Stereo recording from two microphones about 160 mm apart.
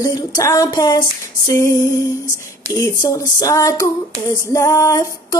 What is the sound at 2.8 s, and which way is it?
Female singing, 20° left (ahead or behind).